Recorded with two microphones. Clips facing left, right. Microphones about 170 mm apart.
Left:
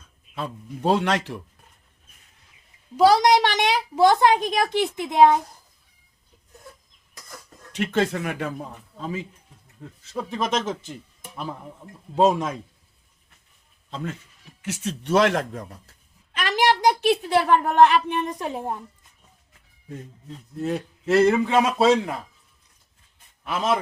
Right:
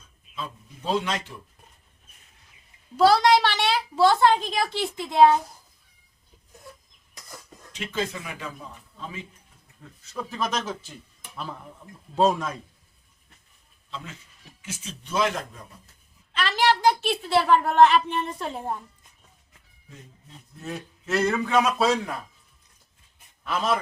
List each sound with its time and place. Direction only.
0.3 s speech: 65° left (ahead or behind)
3.0 s a child's voice: 15° left (ahead or behind)
7.8 s speech: 70° left (ahead or behind); by 9.2 s 45° left (ahead or behind)
10.1 s a child's voice: 25° left (ahead or behind)
13.9 s speech: 50° left (ahead or behind)
14.6 s speech: 70° left (ahead or behind)
16.3 s a sound: 15° left (ahead or behind)
17.7 s a child's voice: 10° left (ahead or behind)
20.6 s speech: 30° left (ahead or behind)